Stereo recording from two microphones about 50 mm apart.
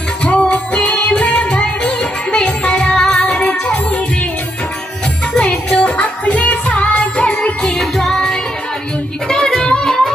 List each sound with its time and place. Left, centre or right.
0.2 s music: left
3.4 s music: left
5.4 s music: left; by 9.9 s centre